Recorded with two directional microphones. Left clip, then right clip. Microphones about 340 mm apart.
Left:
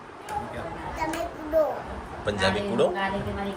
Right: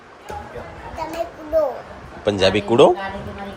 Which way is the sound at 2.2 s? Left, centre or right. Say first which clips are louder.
Right 8 dB; centre.